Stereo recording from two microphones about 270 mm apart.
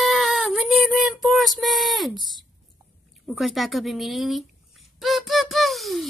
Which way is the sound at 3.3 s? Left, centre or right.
Centre.